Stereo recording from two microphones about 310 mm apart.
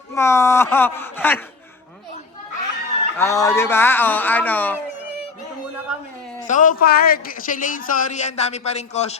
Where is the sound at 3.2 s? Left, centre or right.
Centre.